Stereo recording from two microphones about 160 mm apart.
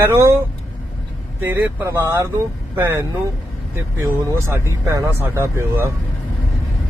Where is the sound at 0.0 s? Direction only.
15° right (ahead or behind).